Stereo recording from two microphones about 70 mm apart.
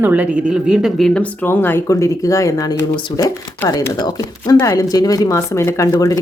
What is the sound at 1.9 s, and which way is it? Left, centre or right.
Speech, left.